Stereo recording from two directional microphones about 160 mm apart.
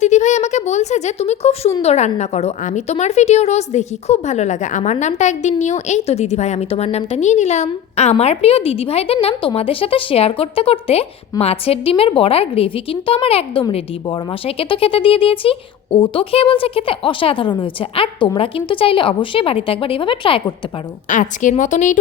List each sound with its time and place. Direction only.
0.0 s a sound: 50° left (ahead or behind)
1.8 s a woman's voice: 45° left (ahead or behind)
21.1 s a woman's voice: 50° left (ahead or behind)